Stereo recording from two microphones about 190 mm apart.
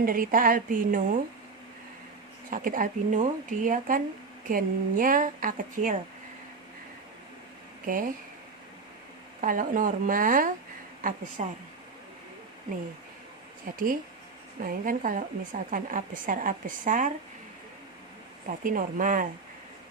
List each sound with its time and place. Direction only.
0.0 s speech: 45° right (ahead or behind)
2.5 s speech: 45° right (ahead or behind)
7.9 s speech: 45° right (ahead or behind)
9.4 s speech: 45° right (ahead or behind)
13.7 s speech: 50° right (ahead or behind)
18.6 s speech: 45° right (ahead or behind)